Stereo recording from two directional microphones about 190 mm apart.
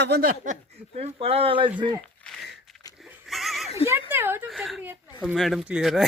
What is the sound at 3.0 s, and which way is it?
Neigh, centre (ahead or behind).